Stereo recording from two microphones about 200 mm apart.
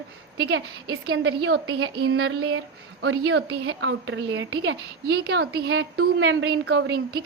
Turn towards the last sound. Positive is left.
turn(degrees=-55)  # may be behind; listen again after turning